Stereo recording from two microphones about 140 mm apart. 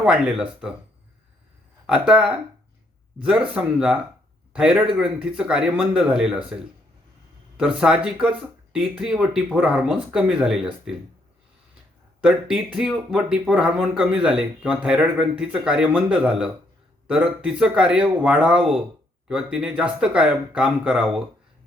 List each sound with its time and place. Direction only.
0.0 s speech: 5° right (ahead or behind)
1.9 s speech: 5° right (ahead or behind)
3.5 s speech: 10° right (ahead or behind)
12.2 s speech: 5° right (ahead or behind)